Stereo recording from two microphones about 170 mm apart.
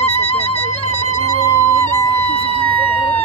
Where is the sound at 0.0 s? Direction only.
35° left (ahead or behind).